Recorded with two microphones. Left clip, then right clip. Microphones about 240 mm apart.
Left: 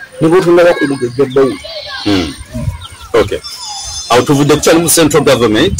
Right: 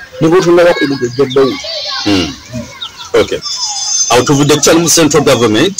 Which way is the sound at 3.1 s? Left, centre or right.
Centre.